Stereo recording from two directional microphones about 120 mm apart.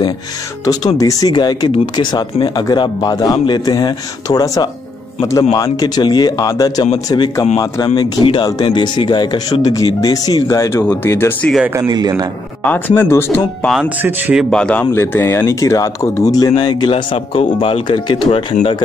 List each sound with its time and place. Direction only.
0.7 s speech: 30° left (ahead or behind)
8.0 s speech: 45° left (ahead or behind)
10.8 s speech: 20° left (ahead or behind)
11.6 s speech: 20° right (ahead or behind)
11.9 s a man's voice: 35° right (ahead or behind)
12.6 s speech: 15° left (ahead or behind)
13.8 s a man's voice: 20° right (ahead or behind)
14.5 s speech: 10° left (ahead or behind); by 18.6 s 45° left (ahead or behind)